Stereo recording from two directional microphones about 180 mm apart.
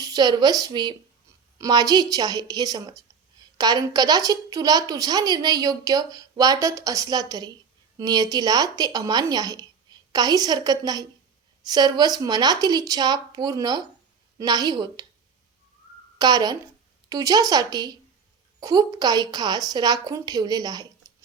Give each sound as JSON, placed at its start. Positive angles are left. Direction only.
{"t": 0.0, "sound": "a woman's voice", "side_deg": -20}
{"t": 16.1, "sound": "a woman's voice", "side_deg": -20}